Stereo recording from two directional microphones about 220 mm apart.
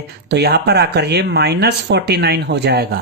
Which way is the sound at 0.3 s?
50° right (ahead or behind).